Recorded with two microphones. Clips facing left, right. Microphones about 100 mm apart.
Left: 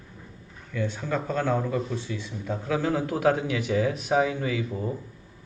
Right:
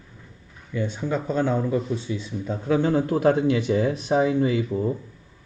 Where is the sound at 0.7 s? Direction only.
15° right (ahead or behind).